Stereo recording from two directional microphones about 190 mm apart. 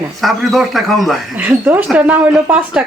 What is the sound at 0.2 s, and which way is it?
Speech, centre (ahead or behind).